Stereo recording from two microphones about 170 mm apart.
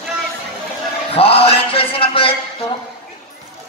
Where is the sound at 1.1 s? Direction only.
35° left (ahead or behind).